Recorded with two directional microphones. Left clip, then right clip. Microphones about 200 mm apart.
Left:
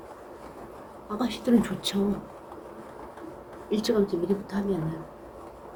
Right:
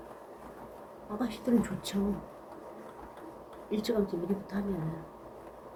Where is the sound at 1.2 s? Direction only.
15° left (ahead or behind).